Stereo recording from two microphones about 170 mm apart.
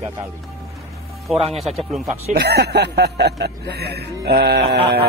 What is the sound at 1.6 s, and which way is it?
Speech, centre (ahead or behind).